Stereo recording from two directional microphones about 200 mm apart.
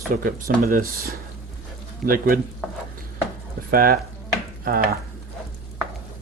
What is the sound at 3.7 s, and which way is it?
Speech, 45° right (ahead or behind).